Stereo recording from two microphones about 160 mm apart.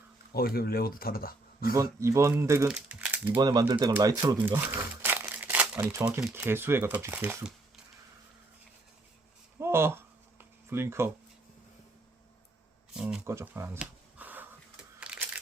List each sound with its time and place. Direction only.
0.3 s speech: 70° left (ahead or behind)
1.7 s speech: 20° right (ahead or behind)
3.4 s speech: 25° right (ahead or behind)
4.4 s crumpling: 10° right (ahead or behind)
6.3 s speech: 15° right (ahead or behind)
9.6 s a sound: 15° right (ahead or behind)
10.7 s speech: 15° right (ahead or behind)
13.0 s speech: 5° right (ahead or behind)
15.0 s a sound: 5° right (ahead or behind)